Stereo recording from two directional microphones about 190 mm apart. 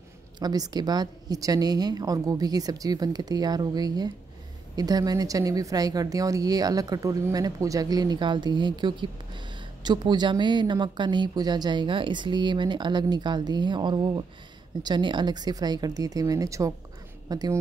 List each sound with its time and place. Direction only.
0.4 s a woman's voice: 20° right (ahead or behind)